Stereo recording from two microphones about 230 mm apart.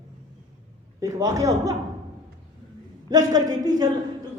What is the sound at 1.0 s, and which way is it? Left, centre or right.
Speech, centre.